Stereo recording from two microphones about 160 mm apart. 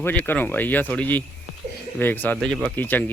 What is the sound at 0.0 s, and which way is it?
Speech, 10° left (ahead or behind).